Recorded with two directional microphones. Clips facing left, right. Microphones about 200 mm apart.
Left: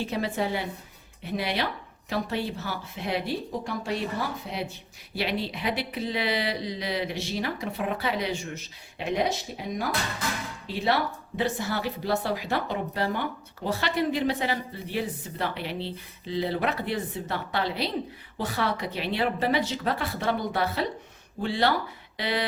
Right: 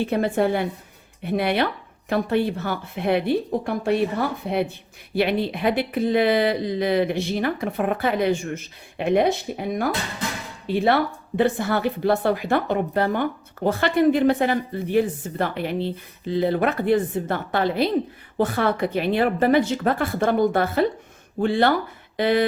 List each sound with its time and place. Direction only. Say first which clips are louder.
0.0 s speech: right 8 dB; 55° right (ahead or behind)